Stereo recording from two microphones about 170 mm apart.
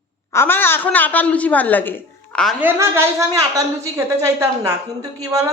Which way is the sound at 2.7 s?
15° right (ahead or behind).